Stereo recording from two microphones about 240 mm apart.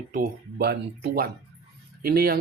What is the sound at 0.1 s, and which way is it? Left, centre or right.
Speech, right.